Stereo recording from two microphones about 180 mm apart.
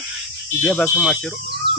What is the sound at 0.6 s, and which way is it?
Cricket, 10° left (ahead or behind).